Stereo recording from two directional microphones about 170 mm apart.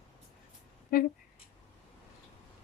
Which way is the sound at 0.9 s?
60° left (ahead or behind).